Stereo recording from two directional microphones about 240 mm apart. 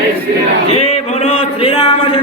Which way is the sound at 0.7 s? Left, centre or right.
Left.